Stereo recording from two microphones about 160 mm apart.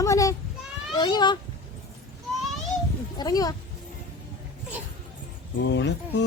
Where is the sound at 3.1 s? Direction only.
25° left (ahead or behind).